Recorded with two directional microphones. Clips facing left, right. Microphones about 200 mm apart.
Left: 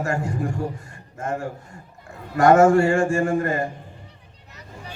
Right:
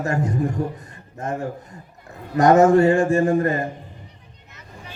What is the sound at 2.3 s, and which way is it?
Speech, 20° right (ahead or behind).